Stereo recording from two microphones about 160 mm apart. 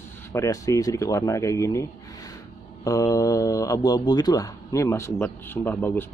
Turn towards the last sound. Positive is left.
turn(degrees=10)  # may be behind; listen again after turning